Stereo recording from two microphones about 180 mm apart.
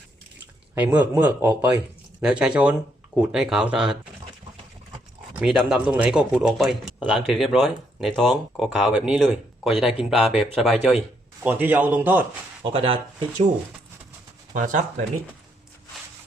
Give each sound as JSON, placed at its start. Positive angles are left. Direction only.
{"t": 0.8, "sound": "speech", "side_deg": -10}
{"t": 5.3, "sound": "speech", "side_deg": -5}
{"t": 11.4, "sound": "speech", "side_deg": -10}
{"t": 12.7, "sound": "speech", "side_deg": -30}
{"t": 14.5, "sound": "speech", "side_deg": -45}